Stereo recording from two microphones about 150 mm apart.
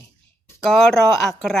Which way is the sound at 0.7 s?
5° left (ahead or behind).